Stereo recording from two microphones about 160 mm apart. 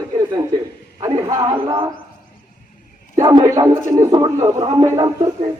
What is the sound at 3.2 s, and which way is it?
A man's voice, 25° right (ahead or behind).